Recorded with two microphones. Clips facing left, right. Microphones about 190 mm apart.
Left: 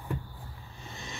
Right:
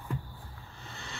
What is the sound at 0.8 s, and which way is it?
Vehicle, 15° left (ahead or behind).